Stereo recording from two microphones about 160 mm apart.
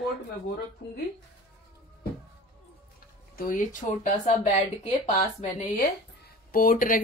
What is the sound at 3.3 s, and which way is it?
Speech, 60° left (ahead or behind).